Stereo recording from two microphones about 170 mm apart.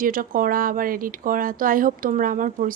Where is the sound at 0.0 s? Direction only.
55° right (ahead or behind).